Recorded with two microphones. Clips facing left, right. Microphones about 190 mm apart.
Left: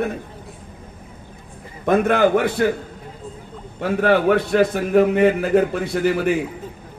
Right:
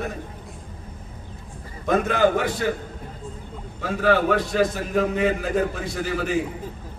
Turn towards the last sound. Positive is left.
turn(degrees=60)  # may be behind; listen again after turning